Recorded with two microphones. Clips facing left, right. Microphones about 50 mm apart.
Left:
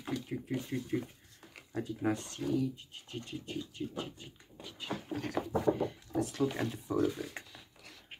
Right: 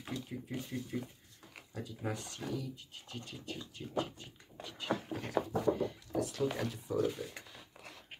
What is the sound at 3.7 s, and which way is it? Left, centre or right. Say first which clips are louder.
Speech: right 2 dB; centre.